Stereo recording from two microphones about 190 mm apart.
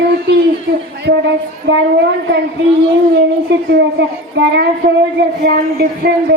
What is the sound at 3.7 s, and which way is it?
A child's voice, 65° right (ahead or behind).